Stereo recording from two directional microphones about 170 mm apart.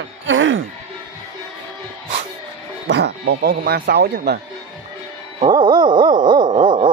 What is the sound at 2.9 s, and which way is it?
Speech, 85° right.